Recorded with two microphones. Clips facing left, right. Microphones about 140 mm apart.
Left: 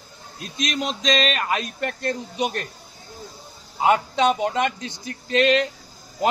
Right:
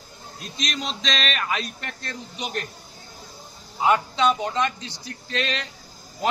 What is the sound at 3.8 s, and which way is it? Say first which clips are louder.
A man's voice: left 2 dB; 55° left (ahead or behind).